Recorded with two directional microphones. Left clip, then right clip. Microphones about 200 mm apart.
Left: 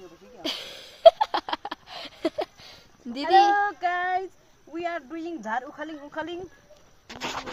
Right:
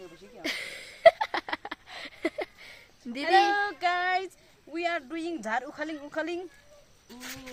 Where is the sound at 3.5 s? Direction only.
20° right (ahead or behind).